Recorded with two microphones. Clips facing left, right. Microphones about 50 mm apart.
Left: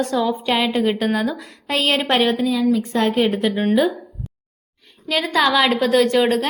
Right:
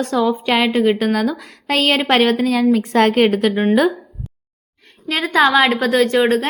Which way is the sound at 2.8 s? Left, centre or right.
Right.